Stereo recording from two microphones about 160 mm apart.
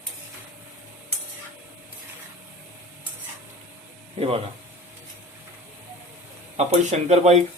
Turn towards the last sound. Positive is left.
turn(degrees=-45)  # may be behind; listen again after turning